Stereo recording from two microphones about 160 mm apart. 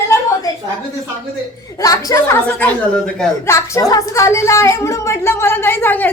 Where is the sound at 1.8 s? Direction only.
20° left (ahead or behind).